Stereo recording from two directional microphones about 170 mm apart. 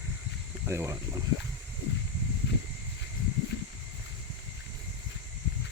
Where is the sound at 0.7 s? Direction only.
15° right (ahead or behind).